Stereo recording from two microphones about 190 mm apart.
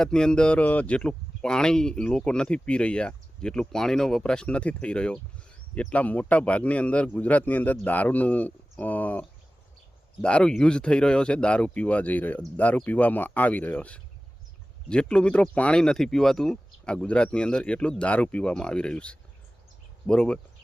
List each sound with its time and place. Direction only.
0.0 s speech: 5° left (ahead or behind)